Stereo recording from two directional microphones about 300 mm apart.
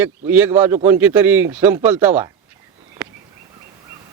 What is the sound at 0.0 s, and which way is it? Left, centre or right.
Speech, centre.